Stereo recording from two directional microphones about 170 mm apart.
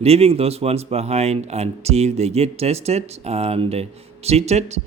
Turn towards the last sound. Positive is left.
turn(degrees=-40)  # may be behind; listen again after turning